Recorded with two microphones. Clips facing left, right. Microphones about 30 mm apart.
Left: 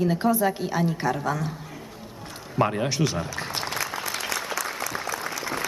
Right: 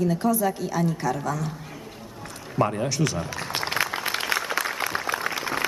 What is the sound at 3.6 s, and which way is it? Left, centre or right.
Applause, right.